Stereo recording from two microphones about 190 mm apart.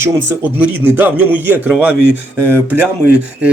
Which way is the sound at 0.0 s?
10° right (ahead or behind).